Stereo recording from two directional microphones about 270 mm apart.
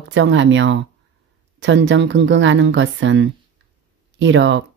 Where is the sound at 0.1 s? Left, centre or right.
Right.